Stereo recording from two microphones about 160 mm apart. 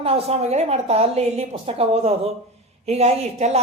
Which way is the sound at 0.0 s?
40° right (ahead or behind).